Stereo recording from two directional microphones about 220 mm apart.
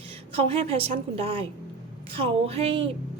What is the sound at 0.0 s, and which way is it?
A woman's voice, 25° right (ahead or behind).